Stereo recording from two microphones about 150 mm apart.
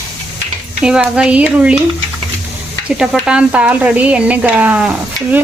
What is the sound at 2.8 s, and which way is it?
Speech, 5° right (ahead or behind).